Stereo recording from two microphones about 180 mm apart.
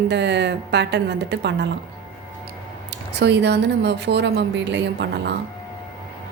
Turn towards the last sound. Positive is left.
turn(degrees=-70)  # may be behind; listen again after turning